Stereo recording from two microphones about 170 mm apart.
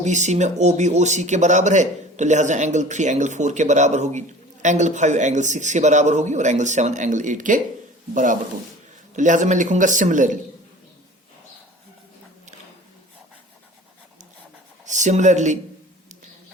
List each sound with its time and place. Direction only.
0.0 s speech: 45° right (ahead or behind)
14.8 s speech: 45° right (ahead or behind)